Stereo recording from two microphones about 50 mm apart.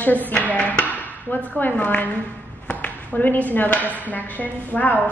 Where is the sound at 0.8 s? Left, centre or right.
Left.